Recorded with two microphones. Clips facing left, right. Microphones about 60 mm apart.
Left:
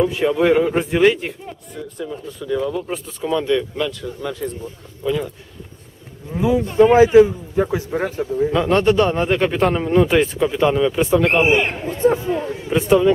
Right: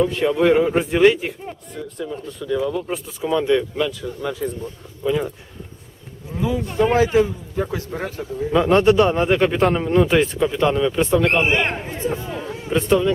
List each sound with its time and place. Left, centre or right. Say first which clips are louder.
0.0 s speech: left 1 dB; centre
6.3 s a man's voice: left 6 dB; centre
8.5 s speech: right 2 dB; centre
12.0 s chatter: left 9 dB; left
12.7 s a man's voice: left 3 dB; centre